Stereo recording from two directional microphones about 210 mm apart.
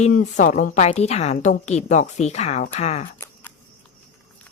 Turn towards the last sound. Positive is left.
turn(degrees=30)  # may be behind; listen again after turning